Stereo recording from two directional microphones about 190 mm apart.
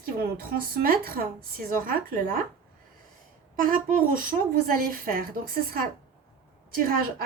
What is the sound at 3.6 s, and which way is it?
A woman's voice, 50° right (ahead or behind).